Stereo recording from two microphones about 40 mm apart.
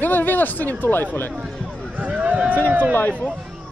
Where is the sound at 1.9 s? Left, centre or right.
Right.